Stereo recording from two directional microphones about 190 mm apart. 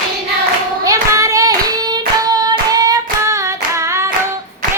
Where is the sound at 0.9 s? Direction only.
15° right (ahead or behind).